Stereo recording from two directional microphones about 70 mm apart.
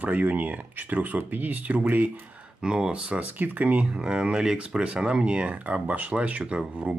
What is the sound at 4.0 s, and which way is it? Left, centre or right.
Speech, centre.